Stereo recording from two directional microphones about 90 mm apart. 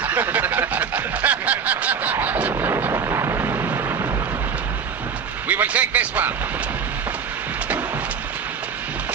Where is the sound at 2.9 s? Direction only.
35° right (ahead or behind).